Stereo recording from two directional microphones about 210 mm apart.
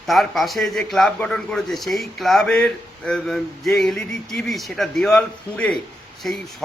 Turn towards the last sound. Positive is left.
turn(degrees=0)  # may be behind; listen again after turning